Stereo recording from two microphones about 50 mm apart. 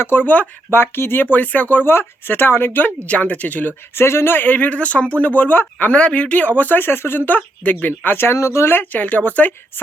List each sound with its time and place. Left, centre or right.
0.0 s speech: left
1.7 s speech: left
3.1 s speech: left
3.9 s speech: left
4.5 s speech: left
6.6 s speech: left
8.4 s speech: left
8.7 s speech: left